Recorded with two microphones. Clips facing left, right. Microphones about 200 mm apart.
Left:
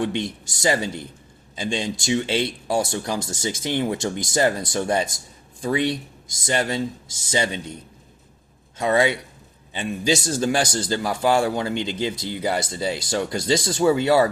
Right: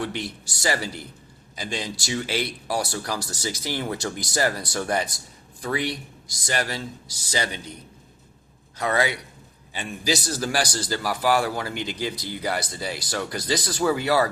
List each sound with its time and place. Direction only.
0.0 s a man's voice: 20° left (ahead or behind)
8.8 s a man's voice: 25° left (ahead or behind)